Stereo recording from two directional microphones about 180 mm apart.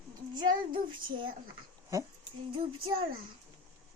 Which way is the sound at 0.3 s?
25° right (ahead or behind).